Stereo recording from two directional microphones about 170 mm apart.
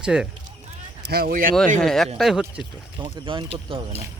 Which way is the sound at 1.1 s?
65° right (ahead or behind).